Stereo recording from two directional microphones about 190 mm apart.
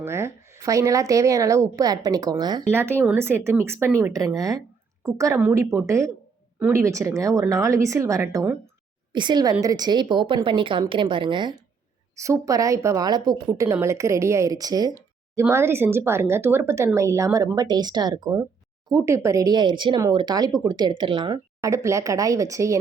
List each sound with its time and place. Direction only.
0.0 s a woman's voice: 15° right (ahead or behind)